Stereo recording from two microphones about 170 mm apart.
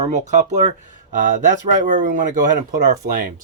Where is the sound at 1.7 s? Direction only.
50° right (ahead or behind).